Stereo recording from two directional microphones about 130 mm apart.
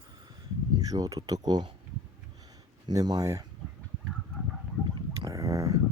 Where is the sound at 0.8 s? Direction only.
30° right (ahead or behind).